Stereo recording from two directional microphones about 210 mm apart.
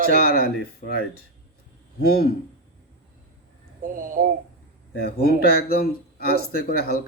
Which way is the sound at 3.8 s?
40° right (ahead or behind).